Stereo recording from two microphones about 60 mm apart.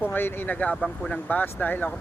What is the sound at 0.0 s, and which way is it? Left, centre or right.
Speech, left.